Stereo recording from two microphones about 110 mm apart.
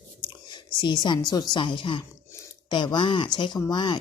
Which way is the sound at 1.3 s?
40° left (ahead or behind).